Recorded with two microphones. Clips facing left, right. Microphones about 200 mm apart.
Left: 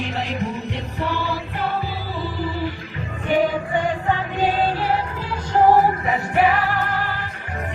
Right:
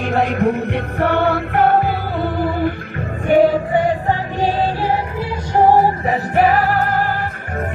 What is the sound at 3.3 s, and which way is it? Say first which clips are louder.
Music: right 7 dB; 40° right (ahead or behind).